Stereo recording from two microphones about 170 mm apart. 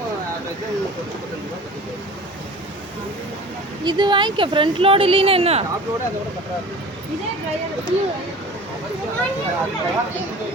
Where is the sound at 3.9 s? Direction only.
25° right (ahead or behind).